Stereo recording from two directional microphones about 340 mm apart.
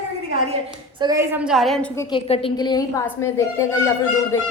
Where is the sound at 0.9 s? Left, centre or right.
Centre.